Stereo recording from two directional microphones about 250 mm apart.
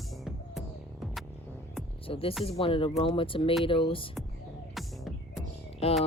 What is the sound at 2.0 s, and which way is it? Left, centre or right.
Speech, left.